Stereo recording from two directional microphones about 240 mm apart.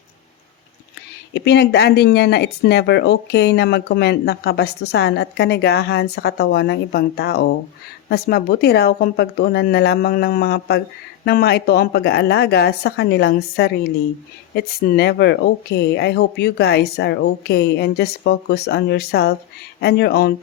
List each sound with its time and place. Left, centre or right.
1.3 s speech: left